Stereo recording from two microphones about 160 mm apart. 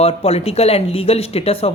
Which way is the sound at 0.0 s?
40° left (ahead or behind).